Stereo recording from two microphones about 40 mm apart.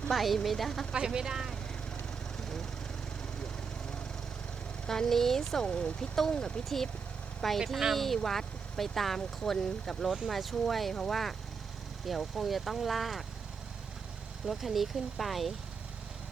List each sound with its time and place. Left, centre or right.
0.1 s speech: centre
1.0 s speech: centre
4.9 s speech: centre
5.6 s speech: left
6.0 s speech: centre
7.4 s speech: centre
10.2 s speech: centre
14.4 s speech: centre